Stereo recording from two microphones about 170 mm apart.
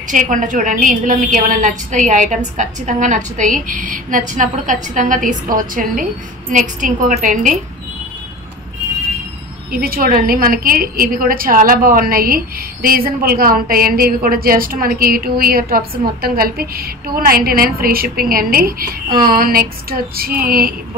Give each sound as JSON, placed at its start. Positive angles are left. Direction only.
{"t": 0.1, "sound": "a woman's voice", "side_deg": -50}
{"t": 9.7, "sound": "a woman's voice", "side_deg": -60}